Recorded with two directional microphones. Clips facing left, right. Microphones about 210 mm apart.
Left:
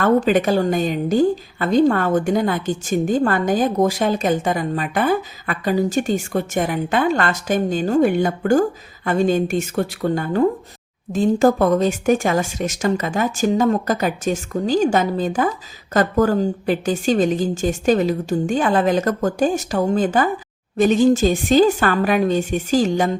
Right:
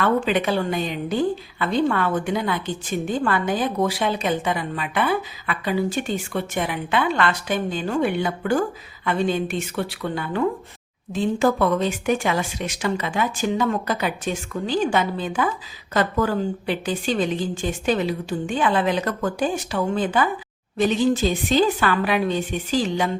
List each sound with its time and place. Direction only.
0.0 s speech: 45° left (ahead or behind)